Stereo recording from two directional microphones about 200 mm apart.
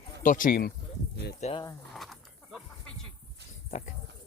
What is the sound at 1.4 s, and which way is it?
Speech, 35° left (ahead or behind).